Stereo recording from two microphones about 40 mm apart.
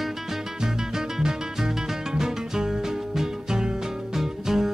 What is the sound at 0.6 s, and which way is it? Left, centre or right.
Music, centre.